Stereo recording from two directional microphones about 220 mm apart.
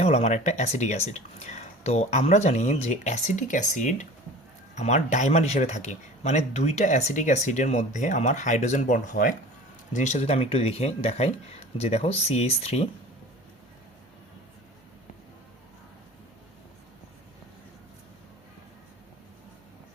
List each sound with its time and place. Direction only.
0.0 s a man's voice: 30° left (ahead or behind)